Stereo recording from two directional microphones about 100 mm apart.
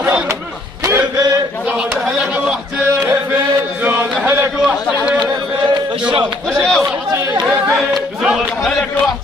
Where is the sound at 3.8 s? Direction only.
20° right (ahead or behind).